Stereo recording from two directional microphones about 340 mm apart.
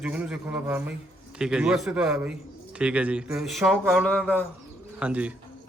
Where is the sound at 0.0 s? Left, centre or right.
Centre.